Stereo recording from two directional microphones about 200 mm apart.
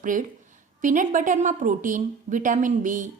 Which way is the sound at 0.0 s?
40° right (ahead or behind).